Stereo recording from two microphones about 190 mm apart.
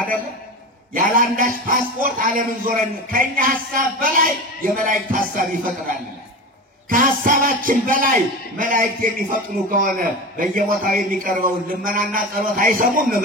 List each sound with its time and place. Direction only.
0.9 s speech: 45° right (ahead or behind)